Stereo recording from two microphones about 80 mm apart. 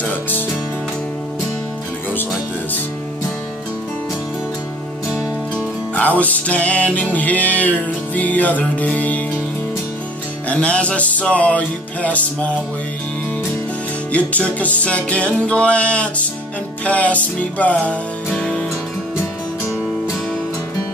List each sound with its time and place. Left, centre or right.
5.9 s music: centre
10.5 s music: centre
14.1 s music: centre